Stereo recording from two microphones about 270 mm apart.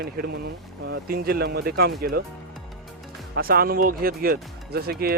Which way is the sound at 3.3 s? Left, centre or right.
Right.